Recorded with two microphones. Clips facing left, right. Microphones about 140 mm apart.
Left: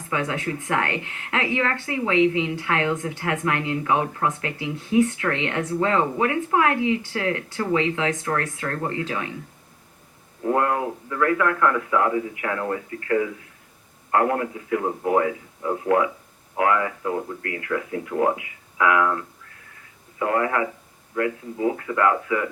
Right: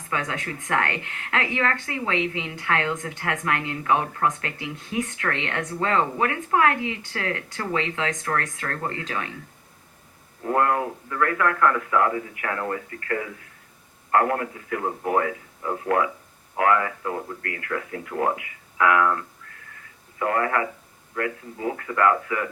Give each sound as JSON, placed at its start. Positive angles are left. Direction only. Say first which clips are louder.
{"t": 0.1, "sound": "a woman's voice", "louder": "left 3 dB", "side_deg": 20}
{"t": 10.5, "sound": "a woman's voice", "louder": "even", "side_deg": 20}